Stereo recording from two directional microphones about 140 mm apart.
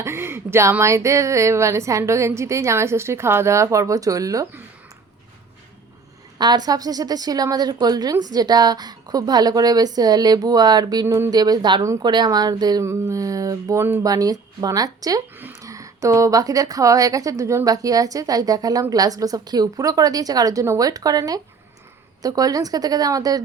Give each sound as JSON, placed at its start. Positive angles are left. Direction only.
{"t": 0.0, "sound": "a woman's voice", "side_deg": -15}
{"t": 6.4, "sound": "a woman's voice", "side_deg": -30}